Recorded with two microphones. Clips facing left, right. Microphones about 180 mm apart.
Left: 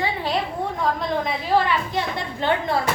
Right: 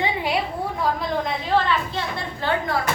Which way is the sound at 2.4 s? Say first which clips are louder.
Left 2 dB; 25° left (ahead or behind).